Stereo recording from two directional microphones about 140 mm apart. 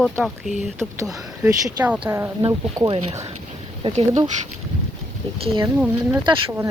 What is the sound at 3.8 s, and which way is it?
Speech, 50° right (ahead or behind).